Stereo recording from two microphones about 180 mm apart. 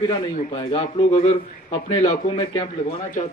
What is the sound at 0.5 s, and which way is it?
Speech, 35° left (ahead or behind).